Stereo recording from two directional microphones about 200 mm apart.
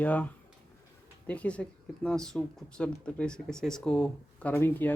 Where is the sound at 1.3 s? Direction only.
5° left (ahead or behind).